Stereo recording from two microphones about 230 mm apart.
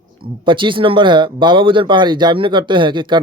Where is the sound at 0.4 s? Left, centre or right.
Right.